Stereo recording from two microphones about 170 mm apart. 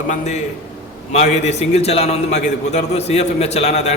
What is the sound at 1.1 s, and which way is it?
A man's voice, 40° left (ahead or behind).